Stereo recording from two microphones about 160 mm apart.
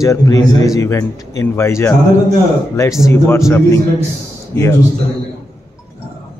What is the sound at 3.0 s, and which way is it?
Speech, 15° left (ahead or behind).